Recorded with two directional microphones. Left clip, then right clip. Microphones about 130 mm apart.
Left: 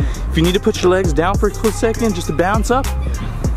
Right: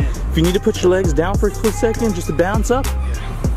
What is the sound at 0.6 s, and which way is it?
Speech, 10° left (ahead or behind).